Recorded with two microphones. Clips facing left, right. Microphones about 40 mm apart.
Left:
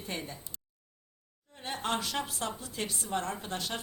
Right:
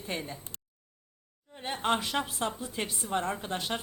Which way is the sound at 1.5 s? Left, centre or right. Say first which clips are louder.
Right 4 dB; centre.